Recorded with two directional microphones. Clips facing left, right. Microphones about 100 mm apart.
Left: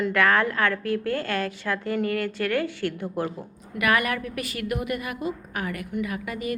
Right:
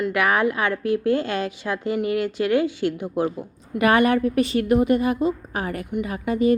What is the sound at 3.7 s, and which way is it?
A woman's voice, 30° right (ahead or behind).